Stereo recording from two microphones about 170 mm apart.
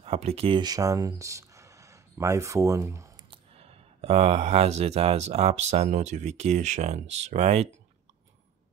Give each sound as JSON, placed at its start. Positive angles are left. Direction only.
{"t": 0.0, "sound": "speech", "side_deg": -35}
{"t": 3.3, "sound": "speech", "side_deg": -35}